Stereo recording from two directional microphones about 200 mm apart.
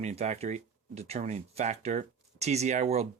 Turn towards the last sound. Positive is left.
turn(degrees=-35)  # may be behind; listen again after turning